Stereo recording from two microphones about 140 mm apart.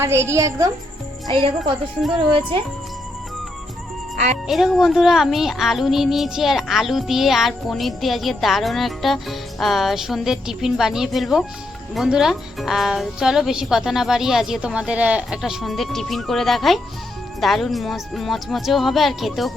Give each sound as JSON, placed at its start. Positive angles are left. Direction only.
{"t": 0.0, "sound": "a woman's voice", "side_deg": -20}
{"t": 2.1, "sound": "speech", "side_deg": -35}
{"t": 4.4, "sound": "speech", "side_deg": 0}